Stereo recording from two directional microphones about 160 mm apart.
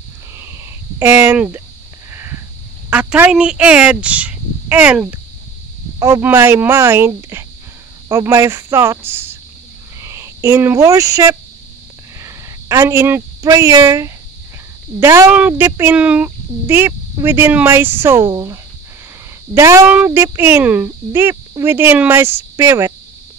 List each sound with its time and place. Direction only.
0.4 s a sound: 15° right (ahead or behind)
2.1 s sniff: 15° right (ahead or behind)
2.9 s speech: 5° right (ahead or behind)
5.9 s speech: 20° right (ahead or behind)